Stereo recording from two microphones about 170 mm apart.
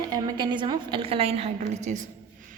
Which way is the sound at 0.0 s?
20° right (ahead or behind).